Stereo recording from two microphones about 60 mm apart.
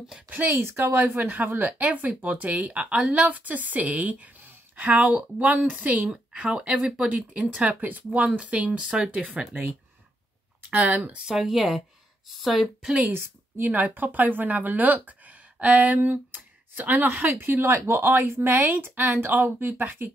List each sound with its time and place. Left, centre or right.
0.3 s a woman's voice: right; by 9.2 s centre
10.7 s speech: right
11.2 s speech: centre
12.8 s speech: centre
13.1 s speech: right
17.6 s speech: right